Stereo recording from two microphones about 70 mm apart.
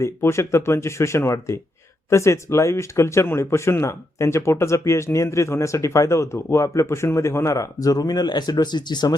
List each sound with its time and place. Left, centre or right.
0.0 s speech: left